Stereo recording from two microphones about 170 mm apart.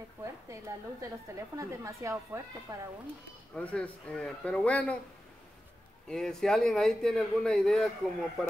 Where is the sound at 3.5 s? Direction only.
5° left (ahead or behind).